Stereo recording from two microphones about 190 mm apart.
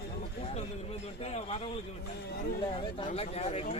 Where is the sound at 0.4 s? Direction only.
30° left (ahead or behind).